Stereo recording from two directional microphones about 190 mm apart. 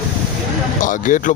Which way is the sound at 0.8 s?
45° left (ahead or behind).